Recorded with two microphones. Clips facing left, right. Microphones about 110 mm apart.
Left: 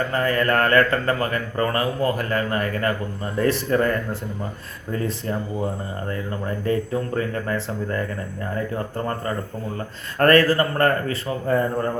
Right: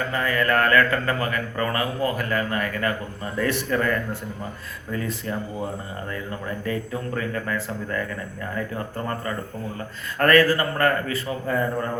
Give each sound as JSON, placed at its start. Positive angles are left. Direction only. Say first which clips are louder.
{"t": 0.1, "sound": "a man's voice", "louder": "even", "side_deg": 35}
{"t": 10.2, "sound": "a man's voice", "louder": "left 2 dB", "side_deg": 40}